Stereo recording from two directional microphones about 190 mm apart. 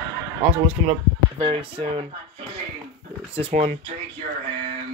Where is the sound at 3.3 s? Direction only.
35° right (ahead or behind).